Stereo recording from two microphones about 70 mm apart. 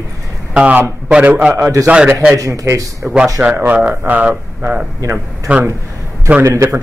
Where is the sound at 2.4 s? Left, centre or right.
Right.